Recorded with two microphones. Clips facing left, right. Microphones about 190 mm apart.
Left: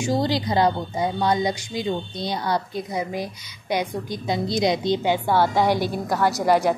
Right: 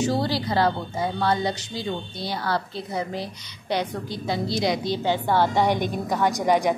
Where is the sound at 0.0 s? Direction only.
15° left (ahead or behind).